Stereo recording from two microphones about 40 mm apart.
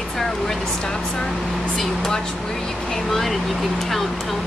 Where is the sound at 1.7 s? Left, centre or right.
Centre.